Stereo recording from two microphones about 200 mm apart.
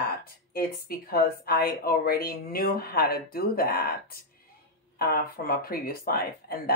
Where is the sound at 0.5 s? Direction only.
45° left (ahead or behind).